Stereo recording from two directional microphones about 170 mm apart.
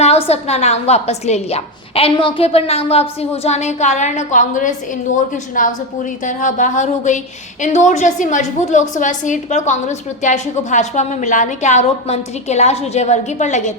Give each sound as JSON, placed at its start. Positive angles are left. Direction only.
{"t": 0.0, "sound": "a woman's voice", "side_deg": 40}